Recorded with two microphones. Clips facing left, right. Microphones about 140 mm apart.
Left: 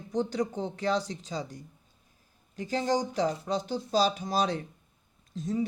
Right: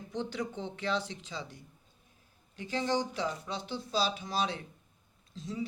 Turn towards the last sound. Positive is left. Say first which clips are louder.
# left 7 dB
turn(degrees=45)  # may be behind; listen again after turning